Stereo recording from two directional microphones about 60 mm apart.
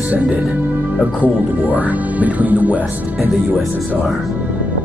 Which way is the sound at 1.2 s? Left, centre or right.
Right.